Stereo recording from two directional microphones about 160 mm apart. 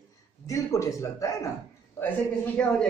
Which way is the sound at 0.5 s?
20° left (ahead or behind).